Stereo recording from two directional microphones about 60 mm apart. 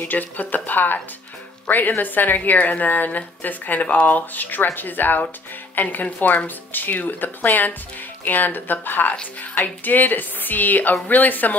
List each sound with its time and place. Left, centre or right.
0.0 s a woman's voice: left